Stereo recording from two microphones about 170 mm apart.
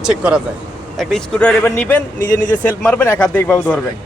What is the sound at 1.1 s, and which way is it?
Speech, 5° left (ahead or behind).